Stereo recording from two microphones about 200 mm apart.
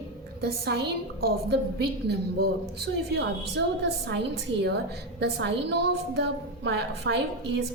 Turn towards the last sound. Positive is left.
turn(degrees=-55)  # may be behind; listen again after turning